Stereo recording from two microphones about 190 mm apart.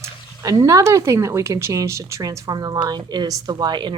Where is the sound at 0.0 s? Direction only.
15° right (ahead or behind).